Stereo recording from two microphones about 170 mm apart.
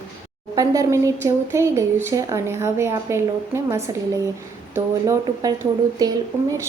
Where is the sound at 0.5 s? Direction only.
20° right (ahead or behind).